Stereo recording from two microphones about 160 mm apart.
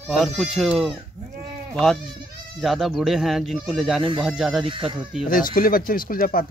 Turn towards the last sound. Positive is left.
turn(degrees=60)  # may be behind; listen again after turning